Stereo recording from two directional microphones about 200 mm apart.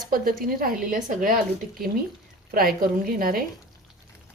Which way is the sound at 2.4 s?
45° right (ahead or behind).